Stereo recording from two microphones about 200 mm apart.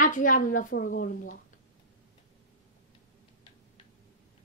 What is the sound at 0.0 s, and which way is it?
A woman's voice, 40° left (ahead or behind).